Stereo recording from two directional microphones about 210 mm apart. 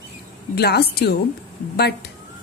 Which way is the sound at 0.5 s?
50° left (ahead or behind).